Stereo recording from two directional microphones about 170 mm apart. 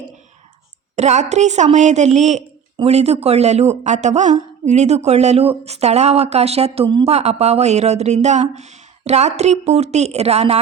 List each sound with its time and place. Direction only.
0.9 s a woman's voice: 40° right (ahead or behind)